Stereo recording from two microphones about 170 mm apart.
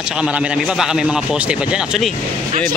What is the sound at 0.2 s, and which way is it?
A man's voice, 5° right (ahead or behind).